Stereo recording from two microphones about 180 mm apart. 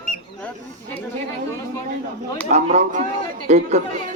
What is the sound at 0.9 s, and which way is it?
Speech, 15° left (ahead or behind).